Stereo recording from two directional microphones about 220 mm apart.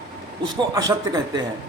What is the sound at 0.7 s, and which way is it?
Speech, 15° right (ahead or behind).